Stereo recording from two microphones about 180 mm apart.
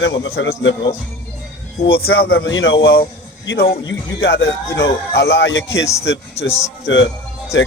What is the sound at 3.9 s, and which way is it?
A man's voice, 90° left.